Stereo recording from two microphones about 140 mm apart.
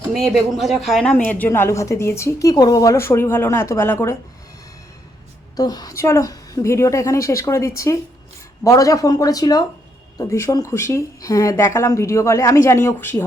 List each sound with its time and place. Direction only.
0.3 s speech: centre (ahead or behind)
1.1 s speech: 15° left (ahead or behind)
5.5 s speech: 25° left (ahead or behind)